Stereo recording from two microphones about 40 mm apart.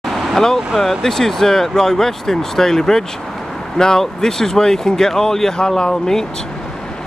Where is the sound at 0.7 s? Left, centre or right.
Centre.